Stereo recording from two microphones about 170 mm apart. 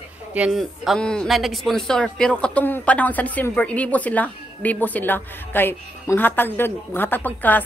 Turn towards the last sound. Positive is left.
turn(degrees=10)  # may be behind; listen again after turning